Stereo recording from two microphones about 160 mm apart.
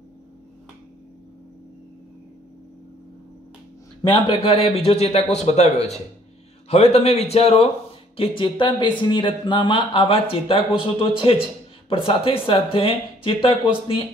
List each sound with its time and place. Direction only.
4.1 s speech: 35° left (ahead or behind)